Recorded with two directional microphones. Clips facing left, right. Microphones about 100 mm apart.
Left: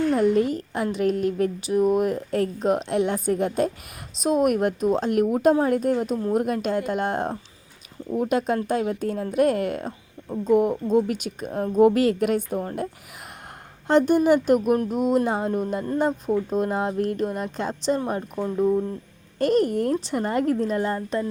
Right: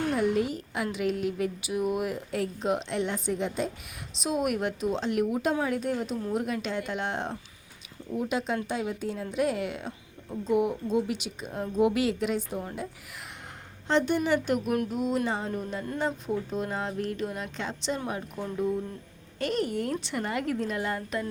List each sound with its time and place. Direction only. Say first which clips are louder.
0.1 s a woman's voice: left 6 dB; 45° left (ahead or behind)